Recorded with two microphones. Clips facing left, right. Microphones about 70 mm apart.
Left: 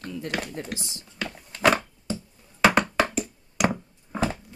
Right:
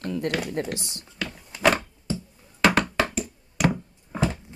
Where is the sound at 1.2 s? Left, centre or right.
Centre.